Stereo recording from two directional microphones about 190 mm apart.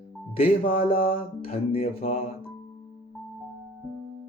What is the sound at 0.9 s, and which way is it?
Mantra, 45° left (ahead or behind).